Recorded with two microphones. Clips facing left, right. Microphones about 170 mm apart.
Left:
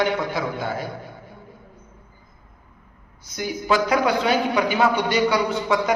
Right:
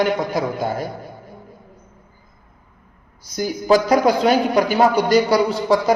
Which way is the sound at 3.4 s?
40° right (ahead or behind).